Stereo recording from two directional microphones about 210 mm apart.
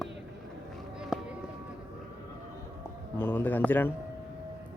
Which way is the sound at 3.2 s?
10° left (ahead or behind).